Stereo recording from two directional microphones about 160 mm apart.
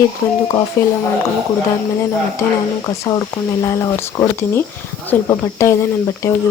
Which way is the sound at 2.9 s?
20° left (ahead or behind).